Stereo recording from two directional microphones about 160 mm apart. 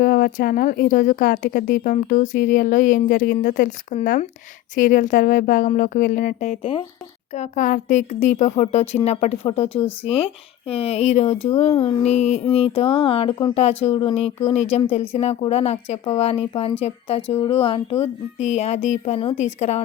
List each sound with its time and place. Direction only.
0.0 s speech: 65° left (ahead or behind); by 6.8 s 35° left (ahead or behind)
7.3 s speech: 55° left (ahead or behind)